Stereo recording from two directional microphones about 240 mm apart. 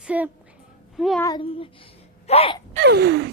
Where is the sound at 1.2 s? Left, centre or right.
Centre.